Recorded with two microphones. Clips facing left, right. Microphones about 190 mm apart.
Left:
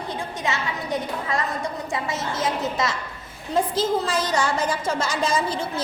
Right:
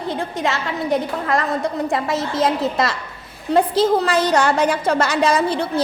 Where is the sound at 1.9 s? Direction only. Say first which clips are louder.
Right 6 dB; 65° right (ahead or behind).